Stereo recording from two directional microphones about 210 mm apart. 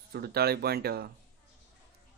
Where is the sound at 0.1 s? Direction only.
50° right (ahead or behind).